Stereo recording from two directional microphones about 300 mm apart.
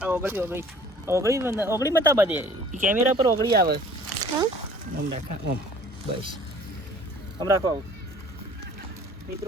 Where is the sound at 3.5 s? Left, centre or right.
Right.